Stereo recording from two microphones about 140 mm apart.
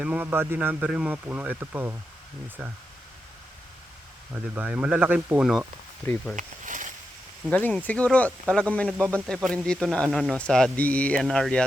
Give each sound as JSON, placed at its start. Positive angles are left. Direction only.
{"t": 0.0, "sound": "speech", "side_deg": -10}
{"t": 4.5, "sound": "speech", "side_deg": -10}
{"t": 6.3, "sound": "snake", "side_deg": -65}
{"t": 7.5, "sound": "speech", "side_deg": 10}